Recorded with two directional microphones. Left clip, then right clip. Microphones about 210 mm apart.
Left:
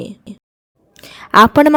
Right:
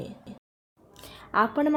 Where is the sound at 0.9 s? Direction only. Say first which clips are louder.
Left 15 dB; 40° left (ahead or behind); by 1.7 s 55° left (ahead or behind).